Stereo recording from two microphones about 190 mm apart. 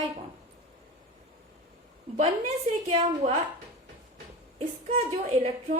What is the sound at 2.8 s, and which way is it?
Speech, 35° right (ahead or behind).